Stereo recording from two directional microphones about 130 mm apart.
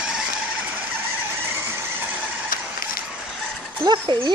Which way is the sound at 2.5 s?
90° left.